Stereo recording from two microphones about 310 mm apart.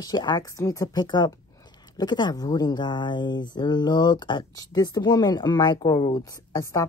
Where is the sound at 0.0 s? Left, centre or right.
Centre.